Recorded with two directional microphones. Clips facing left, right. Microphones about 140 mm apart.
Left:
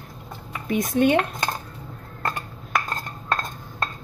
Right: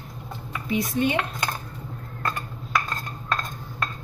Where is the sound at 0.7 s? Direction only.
50° left (ahead or behind).